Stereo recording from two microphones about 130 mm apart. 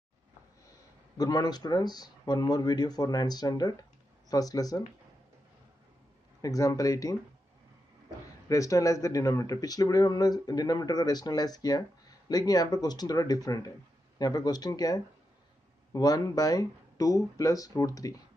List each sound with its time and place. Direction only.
1.1 s speech: 30° left (ahead or behind)
6.4 s speech: 25° left (ahead or behind)
8.5 s speech: 25° left (ahead or behind)